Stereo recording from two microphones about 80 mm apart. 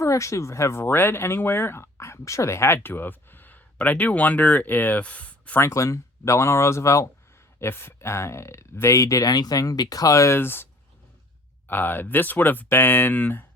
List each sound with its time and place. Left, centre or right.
0.0 s speech: left; by 5.5 s centre
5.5 s speech: left
11.7 s speech: left